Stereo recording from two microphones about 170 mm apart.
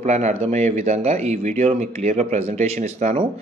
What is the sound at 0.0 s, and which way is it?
A man's voice, 40° right (ahead or behind).